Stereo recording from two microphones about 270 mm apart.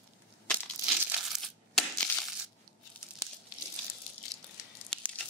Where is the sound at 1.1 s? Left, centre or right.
Centre.